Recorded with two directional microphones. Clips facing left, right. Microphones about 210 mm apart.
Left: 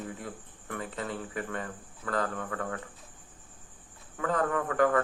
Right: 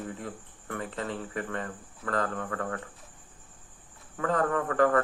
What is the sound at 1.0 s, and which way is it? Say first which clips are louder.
Speech: right 1 dB; 5° left (ahead or behind).